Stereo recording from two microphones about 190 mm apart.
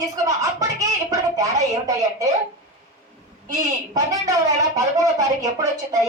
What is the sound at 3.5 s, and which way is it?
A woman's voice, 20° right (ahead or behind).